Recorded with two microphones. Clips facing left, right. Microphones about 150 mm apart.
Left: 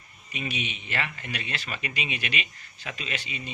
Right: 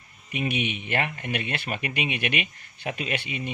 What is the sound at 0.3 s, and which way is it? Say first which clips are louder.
Speech: right 6 dB; 60° right (ahead or behind).